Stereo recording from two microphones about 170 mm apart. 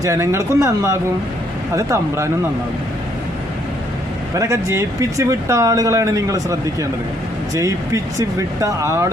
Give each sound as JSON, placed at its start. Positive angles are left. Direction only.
{"t": 0.0, "sound": "a man's voice", "side_deg": -15}
{"t": 4.4, "sound": "speech", "side_deg": -15}